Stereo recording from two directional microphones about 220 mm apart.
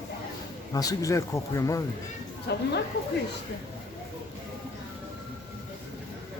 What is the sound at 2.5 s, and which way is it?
Speech, 50° left (ahead or behind).